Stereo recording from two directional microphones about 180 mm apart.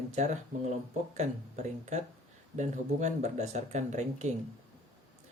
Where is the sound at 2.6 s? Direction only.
40° right (ahead or behind).